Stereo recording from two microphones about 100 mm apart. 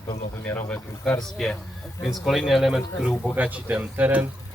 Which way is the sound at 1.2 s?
5° left (ahead or behind).